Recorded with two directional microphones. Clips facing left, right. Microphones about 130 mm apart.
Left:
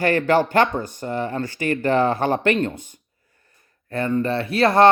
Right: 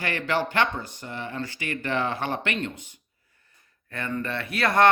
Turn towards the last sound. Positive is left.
turn(degrees=30)  # may be behind; listen again after turning